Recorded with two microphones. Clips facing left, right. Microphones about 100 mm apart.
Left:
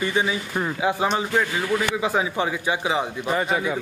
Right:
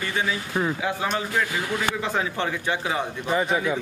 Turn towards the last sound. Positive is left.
turn(degrees=0)  # may be behind; listen again after turning